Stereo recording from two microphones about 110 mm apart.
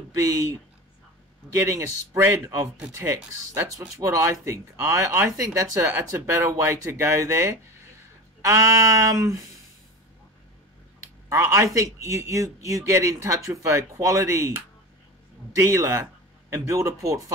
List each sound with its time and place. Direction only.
0.1 s speech: 30° right (ahead or behind)
11.0 s speech: 30° right (ahead or behind)